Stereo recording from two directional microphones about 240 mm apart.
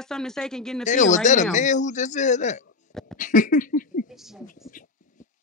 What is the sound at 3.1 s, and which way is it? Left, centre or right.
Speech, left.